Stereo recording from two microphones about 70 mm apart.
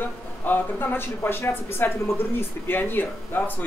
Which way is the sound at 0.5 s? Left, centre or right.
Left.